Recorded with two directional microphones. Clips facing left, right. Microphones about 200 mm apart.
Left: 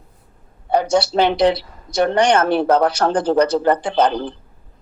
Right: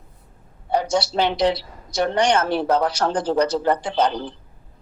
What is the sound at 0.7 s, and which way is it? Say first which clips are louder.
Speech: left 4 dB; 60° left (ahead or behind).